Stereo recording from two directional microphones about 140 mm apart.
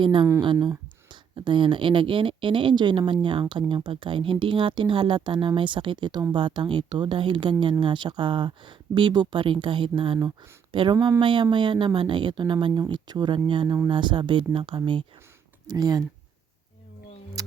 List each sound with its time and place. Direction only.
0.0 s speech: 35° right (ahead or behind)